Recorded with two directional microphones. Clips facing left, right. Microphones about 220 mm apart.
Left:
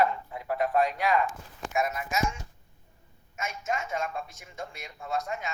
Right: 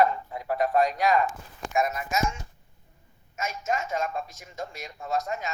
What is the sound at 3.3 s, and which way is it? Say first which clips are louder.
A man's voice: right 3 dB; 40° right (ahead or behind).